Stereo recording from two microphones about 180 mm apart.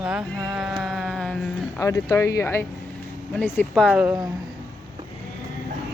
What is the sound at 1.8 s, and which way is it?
Speech, 20° left (ahead or behind).